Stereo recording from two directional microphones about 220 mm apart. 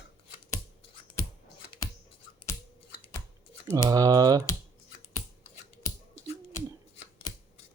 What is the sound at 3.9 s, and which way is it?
Speech, 15° right (ahead or behind).